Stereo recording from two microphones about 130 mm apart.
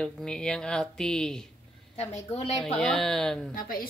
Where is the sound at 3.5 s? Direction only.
90° left.